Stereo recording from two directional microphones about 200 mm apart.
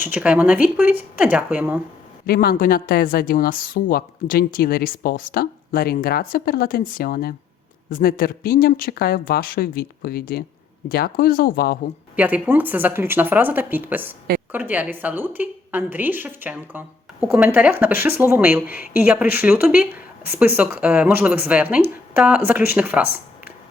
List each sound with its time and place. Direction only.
0.0 s a woman's voice: 10° right (ahead or behind)
2.2 s speech: 50° left (ahead or behind)
12.1 s a woman's voice: 10° right (ahead or behind)